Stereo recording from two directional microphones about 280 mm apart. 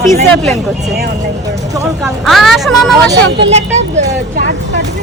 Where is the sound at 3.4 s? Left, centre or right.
Right.